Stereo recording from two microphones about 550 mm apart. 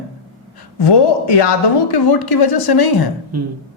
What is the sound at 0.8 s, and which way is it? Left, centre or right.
Speech, left.